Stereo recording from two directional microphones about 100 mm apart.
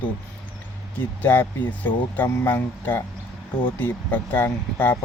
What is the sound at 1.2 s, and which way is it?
Speech, 20° left (ahead or behind).